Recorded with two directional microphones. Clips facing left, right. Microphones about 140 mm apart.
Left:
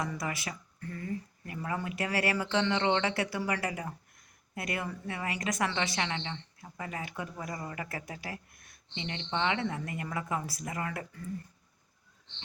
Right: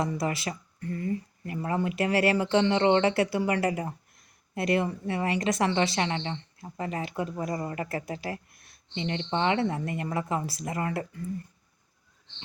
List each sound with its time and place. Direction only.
0.0 s a woman's voice: 30° right (ahead or behind)